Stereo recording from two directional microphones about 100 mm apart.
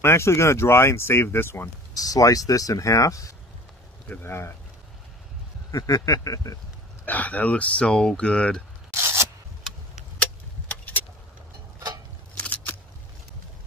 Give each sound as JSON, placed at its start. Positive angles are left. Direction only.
{"t": 0.0, "sound": "speech", "side_deg": 25}
{"t": 2.0, "sound": "speech", "side_deg": 35}
{"t": 4.1, "sound": "speech", "side_deg": 25}
{"t": 5.7, "sound": "speech", "side_deg": 35}
{"t": 7.1, "sound": "speech", "side_deg": 15}
{"t": 8.9, "sound": "a sound", "side_deg": -30}
{"t": 10.7, "sound": "vehicle", "side_deg": 15}
{"t": 12.4, "sound": "scissors", "side_deg": 15}